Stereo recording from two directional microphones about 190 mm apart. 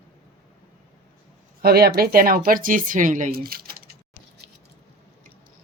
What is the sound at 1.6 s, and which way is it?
Speech, 55° right (ahead or behind).